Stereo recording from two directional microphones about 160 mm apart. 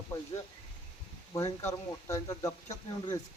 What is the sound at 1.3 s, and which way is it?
Speech, 20° left (ahead or behind).